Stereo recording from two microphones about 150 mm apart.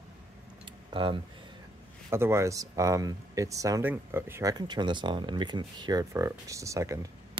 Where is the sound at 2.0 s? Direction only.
15° right (ahead or behind).